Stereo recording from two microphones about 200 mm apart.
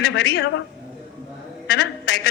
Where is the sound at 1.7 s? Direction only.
55° left (ahead or behind).